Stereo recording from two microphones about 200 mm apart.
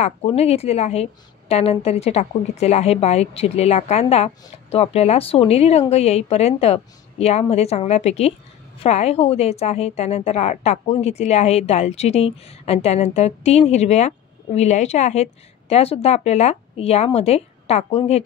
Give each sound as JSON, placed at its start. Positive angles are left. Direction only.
{"t": 0.3, "sound": "a woman's voice", "side_deg": 30}